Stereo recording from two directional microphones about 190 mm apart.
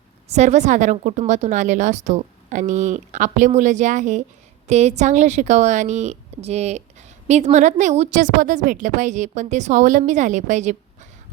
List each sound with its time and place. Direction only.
0.3 s a woman's voice: 35° right (ahead or behind)